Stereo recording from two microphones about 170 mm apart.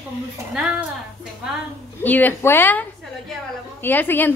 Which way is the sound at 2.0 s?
10° left (ahead or behind).